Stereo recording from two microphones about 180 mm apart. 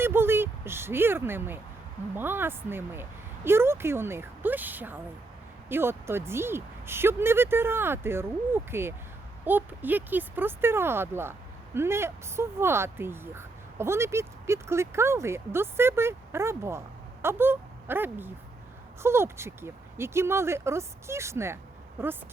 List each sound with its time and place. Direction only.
0.0 s speech: 10° right (ahead or behind)